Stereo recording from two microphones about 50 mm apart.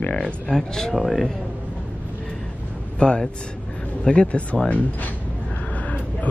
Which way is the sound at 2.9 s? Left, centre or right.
Centre.